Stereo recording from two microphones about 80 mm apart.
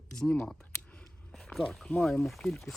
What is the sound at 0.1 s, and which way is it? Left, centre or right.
Speech, centre.